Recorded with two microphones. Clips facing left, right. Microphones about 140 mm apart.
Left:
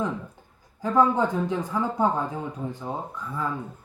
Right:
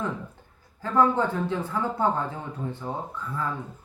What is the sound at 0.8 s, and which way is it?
Speech, 15° left (ahead or behind).